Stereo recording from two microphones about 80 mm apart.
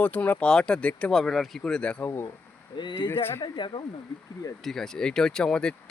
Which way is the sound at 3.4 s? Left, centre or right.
Left.